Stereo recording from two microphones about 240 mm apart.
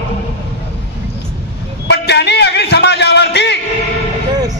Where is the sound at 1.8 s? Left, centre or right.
Left.